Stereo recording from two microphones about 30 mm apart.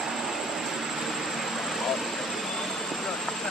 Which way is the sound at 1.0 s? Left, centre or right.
Centre.